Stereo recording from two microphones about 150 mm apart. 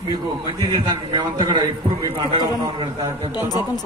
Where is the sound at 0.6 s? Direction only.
30° right (ahead or behind).